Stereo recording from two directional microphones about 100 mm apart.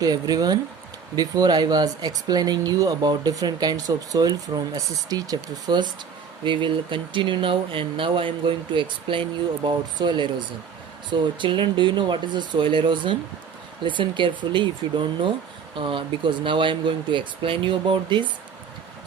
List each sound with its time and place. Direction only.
0.0 s speech: 40° right (ahead or behind)
6.4 s speech: 55° right (ahead or behind)